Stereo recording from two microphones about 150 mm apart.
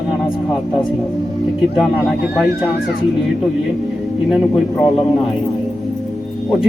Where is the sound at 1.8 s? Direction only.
Centre (ahead or behind).